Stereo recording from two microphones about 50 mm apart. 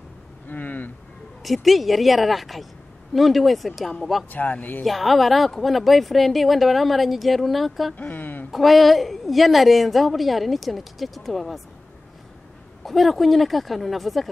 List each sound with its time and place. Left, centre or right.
0.5 s vehicle: left
1.4 s a woman's voice: centre
4.3 s speech: left
4.8 s a woman's voice: centre
7.9 s speech: left
8.5 s a woman's voice: centre
12.8 s a woman's voice: centre